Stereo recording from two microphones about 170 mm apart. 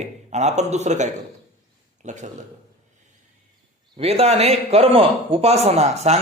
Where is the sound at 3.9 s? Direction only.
35° right (ahead or behind).